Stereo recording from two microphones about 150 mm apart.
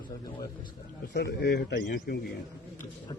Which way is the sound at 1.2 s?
90° left.